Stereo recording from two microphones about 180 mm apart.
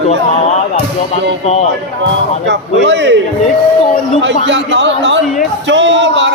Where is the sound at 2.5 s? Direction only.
85° right.